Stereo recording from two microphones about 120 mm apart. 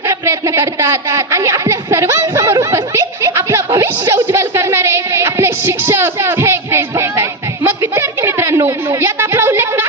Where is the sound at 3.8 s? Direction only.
25° right (ahead or behind).